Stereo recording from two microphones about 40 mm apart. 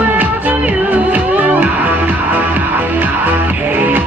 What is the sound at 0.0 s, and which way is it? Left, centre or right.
Music, right.